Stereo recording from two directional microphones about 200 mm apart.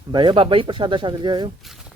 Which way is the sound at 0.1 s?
25° right (ahead or behind).